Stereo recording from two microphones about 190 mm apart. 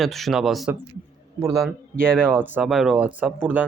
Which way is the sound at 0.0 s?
Centre (ahead or behind).